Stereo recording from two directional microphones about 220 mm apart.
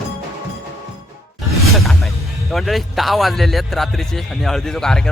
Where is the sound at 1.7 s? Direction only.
Centre (ahead or behind).